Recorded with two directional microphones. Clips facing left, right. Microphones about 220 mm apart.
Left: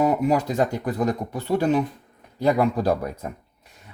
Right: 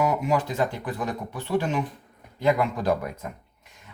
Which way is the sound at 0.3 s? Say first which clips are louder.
Left 3 dB; 40° left (ahead or behind).